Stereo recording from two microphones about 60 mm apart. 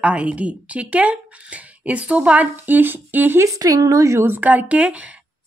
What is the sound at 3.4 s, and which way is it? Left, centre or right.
Speech, right.